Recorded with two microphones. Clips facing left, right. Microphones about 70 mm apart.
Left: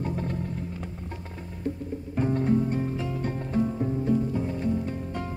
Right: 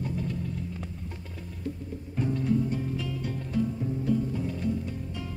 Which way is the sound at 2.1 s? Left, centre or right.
Left.